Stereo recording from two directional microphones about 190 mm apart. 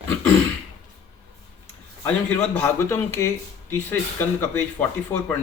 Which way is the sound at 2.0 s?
10° left (ahead or behind).